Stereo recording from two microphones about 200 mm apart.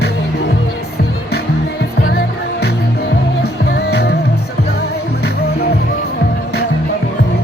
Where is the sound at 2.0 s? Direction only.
50° left (ahead or behind).